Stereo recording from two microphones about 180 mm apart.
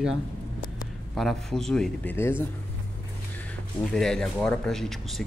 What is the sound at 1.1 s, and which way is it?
Speech, centre (ahead or behind).